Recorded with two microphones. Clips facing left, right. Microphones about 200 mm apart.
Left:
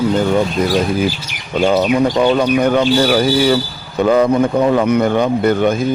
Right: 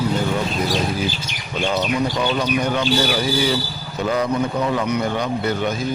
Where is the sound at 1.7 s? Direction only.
55° left (ahead or behind).